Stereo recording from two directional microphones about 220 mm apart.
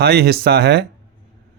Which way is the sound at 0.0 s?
45° right (ahead or behind).